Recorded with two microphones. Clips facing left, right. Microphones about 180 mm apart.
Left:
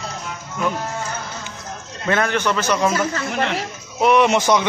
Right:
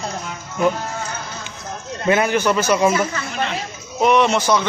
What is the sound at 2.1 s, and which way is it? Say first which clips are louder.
Speech: right 3 dB; 10° right (ahead or behind).